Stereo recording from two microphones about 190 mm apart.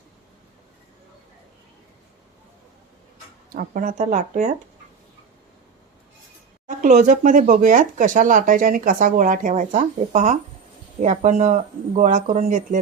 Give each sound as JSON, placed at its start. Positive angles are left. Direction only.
{"t": 3.5, "sound": "speech", "side_deg": -50}
{"t": 6.7, "sound": "speech", "side_deg": -40}